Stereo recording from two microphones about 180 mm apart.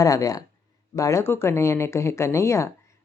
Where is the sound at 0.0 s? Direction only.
20° left (ahead or behind).